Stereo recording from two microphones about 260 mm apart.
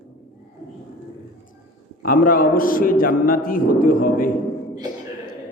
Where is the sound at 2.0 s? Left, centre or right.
Left.